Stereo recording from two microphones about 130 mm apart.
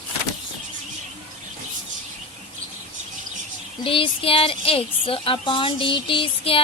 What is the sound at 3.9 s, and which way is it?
A woman's voice, 45° left (ahead or behind).